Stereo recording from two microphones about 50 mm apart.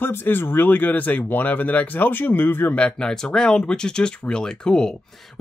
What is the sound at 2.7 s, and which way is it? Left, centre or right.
Speech, centre.